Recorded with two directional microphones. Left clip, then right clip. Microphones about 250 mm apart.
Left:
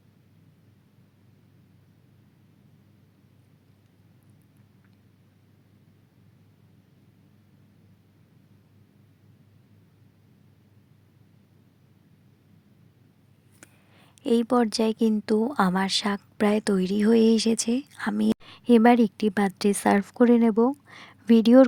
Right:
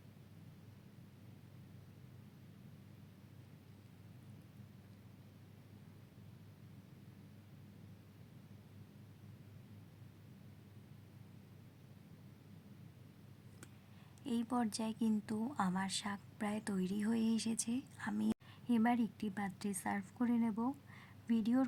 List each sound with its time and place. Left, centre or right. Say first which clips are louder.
14.2 s speech: left 17 dB; left